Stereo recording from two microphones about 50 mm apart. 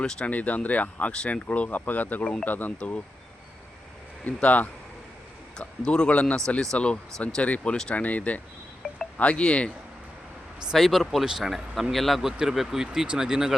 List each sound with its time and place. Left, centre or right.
0.0 s speech: centre
0.3 s speech: left
4.2 s speech: left
5.5 s speech: centre
10.8 s speech: centre
12.4 s speech: centre